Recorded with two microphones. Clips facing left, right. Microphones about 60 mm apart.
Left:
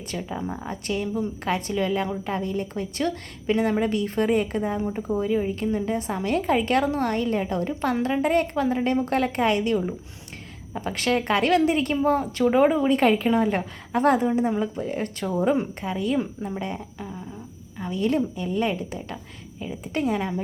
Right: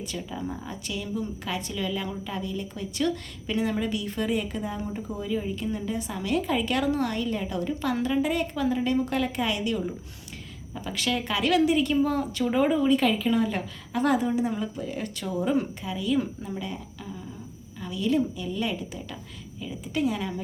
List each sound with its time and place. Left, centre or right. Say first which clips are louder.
0.2 s a woman's voice: left 5 dB; left
12.9 s a woman's voice: left 3 dB; left
15.8 s a woman's voice: left 2 dB; left